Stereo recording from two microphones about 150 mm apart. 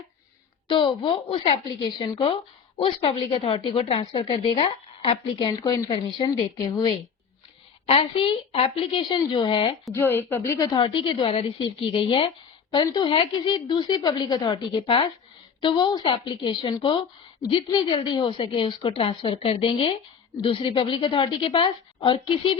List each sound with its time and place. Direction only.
0.7 s a woman's voice: 35° left (ahead or behind)
7.9 s a woman's voice: 40° left (ahead or behind)
9.9 s a woman's voice: 15° left (ahead or behind); by 22.5 s 35° left (ahead or behind)